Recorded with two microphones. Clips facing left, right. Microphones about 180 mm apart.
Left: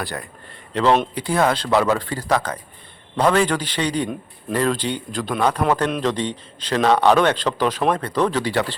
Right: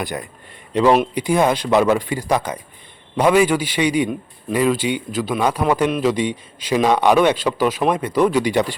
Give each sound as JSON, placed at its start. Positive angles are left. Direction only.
{"t": 0.0, "sound": "a man's voice", "side_deg": -15}